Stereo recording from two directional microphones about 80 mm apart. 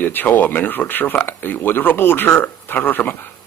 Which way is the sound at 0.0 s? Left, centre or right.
Left.